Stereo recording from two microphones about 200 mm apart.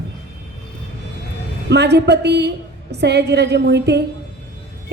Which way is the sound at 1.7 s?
55° right (ahead or behind).